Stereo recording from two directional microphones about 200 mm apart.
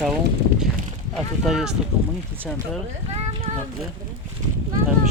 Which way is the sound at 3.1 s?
30° right (ahead or behind).